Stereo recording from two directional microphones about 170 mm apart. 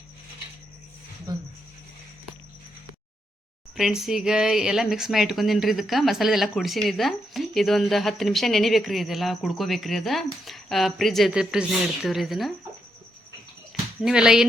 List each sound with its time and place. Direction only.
1.3 s speech: 20° right (ahead or behind)
3.8 s speech: centre (ahead or behind)
14.0 s speech: 5° right (ahead or behind)